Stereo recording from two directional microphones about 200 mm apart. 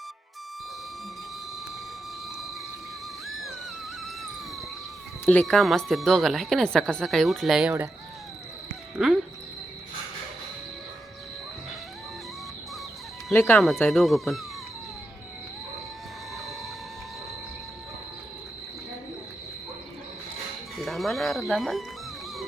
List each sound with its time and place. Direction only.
3.2 s a sound: centre (ahead or behind)
4.0 s music: centre (ahead or behind)
5.2 s a woman's voice: 5° left (ahead or behind)
9.0 s a woman's voice: centre (ahead or behind)
13.4 s a woman's voice: centre (ahead or behind)
20.7 s speech: centre (ahead or behind)